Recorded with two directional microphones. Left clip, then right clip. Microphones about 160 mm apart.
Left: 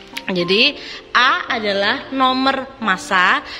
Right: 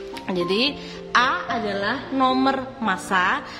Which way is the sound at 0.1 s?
15° left (ahead or behind).